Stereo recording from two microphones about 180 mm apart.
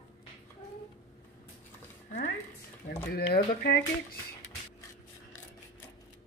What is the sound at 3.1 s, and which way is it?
Speech, 60° left (ahead or behind).